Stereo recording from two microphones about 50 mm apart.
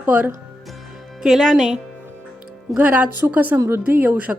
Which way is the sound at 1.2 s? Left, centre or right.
Centre.